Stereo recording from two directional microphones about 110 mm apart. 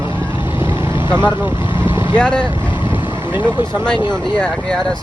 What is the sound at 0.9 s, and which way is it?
Vehicle, 45° left (ahead or behind).